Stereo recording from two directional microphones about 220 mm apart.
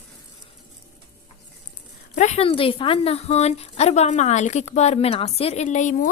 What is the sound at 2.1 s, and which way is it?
A woman's voice, 30° left (ahead or behind).